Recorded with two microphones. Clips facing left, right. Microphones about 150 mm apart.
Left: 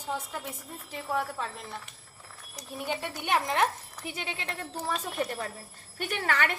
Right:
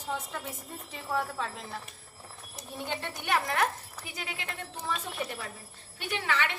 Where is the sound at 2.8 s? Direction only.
15° left (ahead or behind); by 5.0 s 35° left (ahead or behind).